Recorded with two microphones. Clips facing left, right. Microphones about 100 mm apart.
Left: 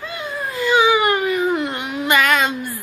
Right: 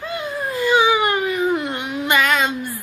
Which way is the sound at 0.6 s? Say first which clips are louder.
Left 1 dB; 30° right (ahead or behind).